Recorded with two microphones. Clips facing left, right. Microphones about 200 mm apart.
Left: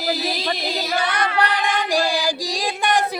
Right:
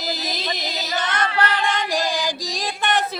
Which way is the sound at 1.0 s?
15° left (ahead or behind).